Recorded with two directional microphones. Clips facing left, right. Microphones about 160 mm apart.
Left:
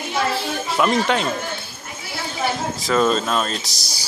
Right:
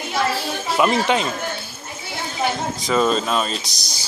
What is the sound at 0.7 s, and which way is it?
Speech, 5° right (ahead or behind).